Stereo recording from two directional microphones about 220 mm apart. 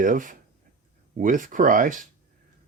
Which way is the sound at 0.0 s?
35° right (ahead or behind).